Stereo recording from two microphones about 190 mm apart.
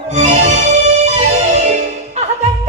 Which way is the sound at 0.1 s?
35° right (ahead or behind).